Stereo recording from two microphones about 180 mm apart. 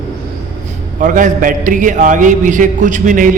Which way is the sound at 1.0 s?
45° right (ahead or behind).